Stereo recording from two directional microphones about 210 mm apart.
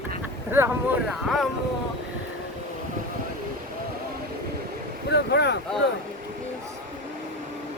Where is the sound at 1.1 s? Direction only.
Centre (ahead or behind).